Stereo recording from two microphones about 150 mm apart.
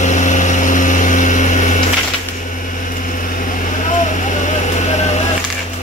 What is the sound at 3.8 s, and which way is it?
Vehicle, 55° left (ahead or behind).